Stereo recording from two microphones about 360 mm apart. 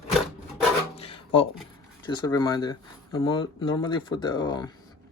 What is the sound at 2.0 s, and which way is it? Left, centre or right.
Speech, centre.